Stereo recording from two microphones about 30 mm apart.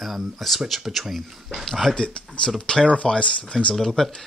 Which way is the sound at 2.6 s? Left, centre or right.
Left.